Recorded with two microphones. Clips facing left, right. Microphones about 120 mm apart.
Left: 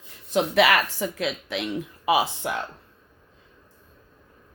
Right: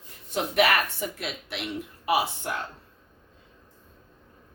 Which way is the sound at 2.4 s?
90° left.